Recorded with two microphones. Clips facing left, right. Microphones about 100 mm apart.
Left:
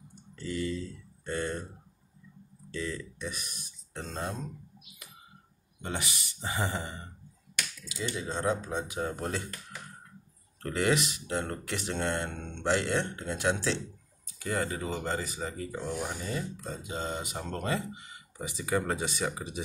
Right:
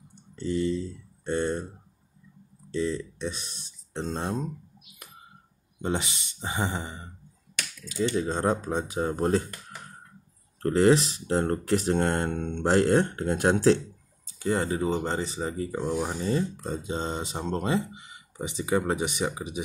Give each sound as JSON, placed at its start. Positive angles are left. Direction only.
{"t": 0.4, "sound": "speech", "side_deg": -25}
{"t": 2.7, "sound": "speech", "side_deg": -25}
{"t": 5.8, "sound": "speech", "side_deg": -25}
{"t": 7.9, "sound": "speech", "side_deg": -45}
{"t": 10.6, "sound": "speech", "side_deg": -35}
{"t": 14.2, "sound": "speech", "side_deg": -30}